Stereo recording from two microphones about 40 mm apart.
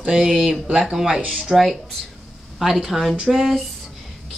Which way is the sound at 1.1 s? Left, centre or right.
Right.